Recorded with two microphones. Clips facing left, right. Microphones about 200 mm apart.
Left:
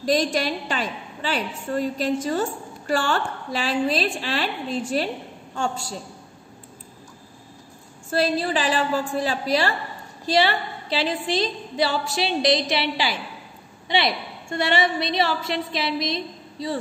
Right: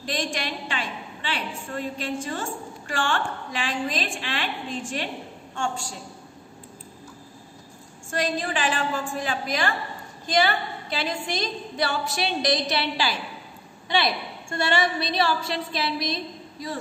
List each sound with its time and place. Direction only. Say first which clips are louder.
0.0 s a woman's voice: left 8 dB; 40° left (ahead or behind)
8.1 s a woman's voice: left 5 dB; 35° left (ahead or behind)